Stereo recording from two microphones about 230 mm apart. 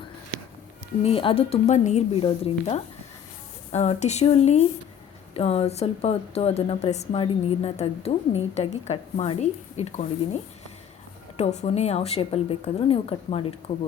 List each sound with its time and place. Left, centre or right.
1.0 s speech: left